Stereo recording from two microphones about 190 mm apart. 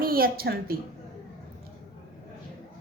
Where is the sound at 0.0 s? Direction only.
50° right (ahead or behind).